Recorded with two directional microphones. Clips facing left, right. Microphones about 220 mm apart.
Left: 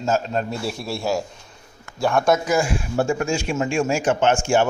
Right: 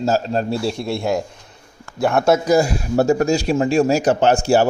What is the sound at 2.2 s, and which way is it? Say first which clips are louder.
Speech: right 4 dB; 35° right (ahead or behind).